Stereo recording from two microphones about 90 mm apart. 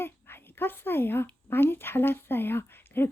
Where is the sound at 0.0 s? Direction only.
25° left (ahead or behind).